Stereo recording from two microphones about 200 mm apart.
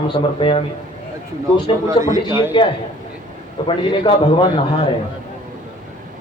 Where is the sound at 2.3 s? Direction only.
15° right (ahead or behind).